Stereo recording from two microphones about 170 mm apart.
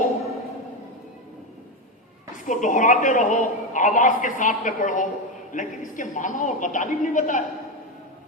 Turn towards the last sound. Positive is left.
turn(degrees=45)  # may be behind; listen again after turning